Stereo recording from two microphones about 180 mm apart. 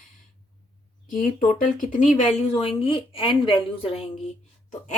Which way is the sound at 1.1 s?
50° left (ahead or behind).